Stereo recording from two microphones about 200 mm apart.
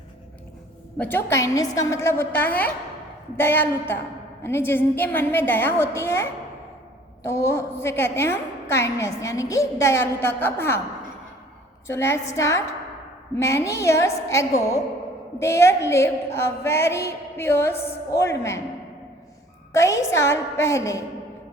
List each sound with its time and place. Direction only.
0.9 s a woman's voice: 10° left (ahead or behind)
11.9 s a woman's voice: 15° left (ahead or behind)
19.7 s a woman's voice: 15° left (ahead or behind)